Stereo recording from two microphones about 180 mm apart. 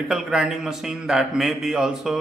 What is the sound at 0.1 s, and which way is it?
A man's voice, 5° right (ahead or behind).